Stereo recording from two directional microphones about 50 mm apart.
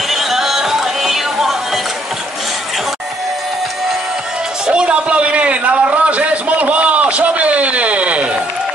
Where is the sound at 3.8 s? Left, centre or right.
Centre.